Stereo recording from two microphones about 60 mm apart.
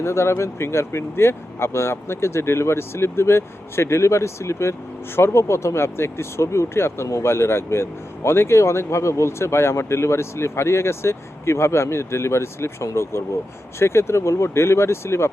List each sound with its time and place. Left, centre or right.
0.0 s speech: left